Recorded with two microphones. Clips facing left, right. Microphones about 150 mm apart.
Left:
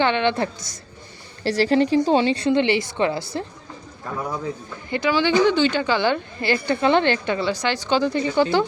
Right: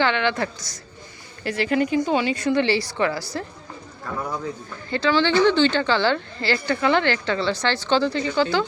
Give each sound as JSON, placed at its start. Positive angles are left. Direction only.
{"t": 0.0, "sound": "a woman's voice", "side_deg": 20}
{"t": 1.5, "sound": "a woman's voice", "side_deg": 35}
{"t": 4.9, "sound": "a woman's voice", "side_deg": 15}